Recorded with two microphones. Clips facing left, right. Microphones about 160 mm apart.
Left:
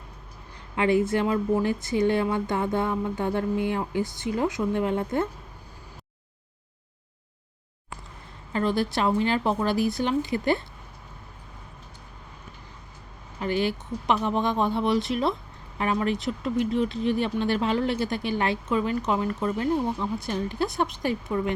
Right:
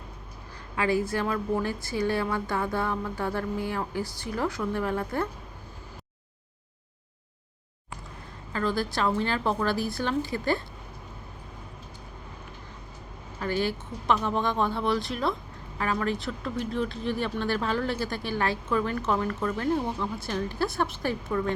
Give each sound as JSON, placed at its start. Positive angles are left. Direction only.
{"t": 0.8, "sound": "speech", "side_deg": 25}
{"t": 8.5, "sound": "speech", "side_deg": 20}
{"t": 13.4, "sound": "speech", "side_deg": 15}